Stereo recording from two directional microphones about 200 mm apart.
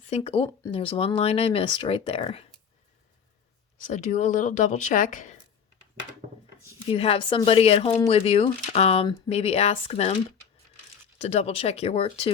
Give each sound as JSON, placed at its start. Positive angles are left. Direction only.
{"t": 0.1, "sound": "speech", "side_deg": 30}
{"t": 3.8, "sound": "speech", "side_deg": 40}
{"t": 6.8, "sound": "speech", "side_deg": 30}
{"t": 11.2, "sound": "speech", "side_deg": 30}